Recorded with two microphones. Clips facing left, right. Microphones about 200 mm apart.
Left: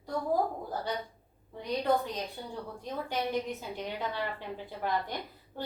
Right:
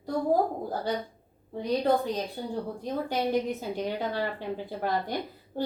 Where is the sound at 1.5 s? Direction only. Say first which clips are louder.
Right 4 dB; 30° right (ahead or behind).